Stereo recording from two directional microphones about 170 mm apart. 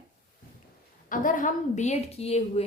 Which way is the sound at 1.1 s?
50° left (ahead or behind).